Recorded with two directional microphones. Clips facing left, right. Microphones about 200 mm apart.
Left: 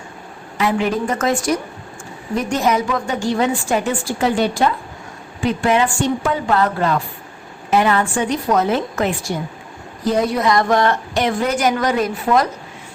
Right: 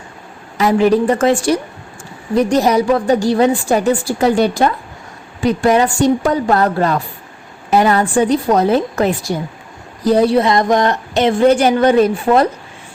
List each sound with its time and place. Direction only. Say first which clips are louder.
0.6 s a woman's voice: right 7 dB; 40° right (ahead or behind)